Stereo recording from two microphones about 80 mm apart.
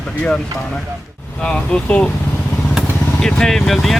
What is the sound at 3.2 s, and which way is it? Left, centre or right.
Speech, centre.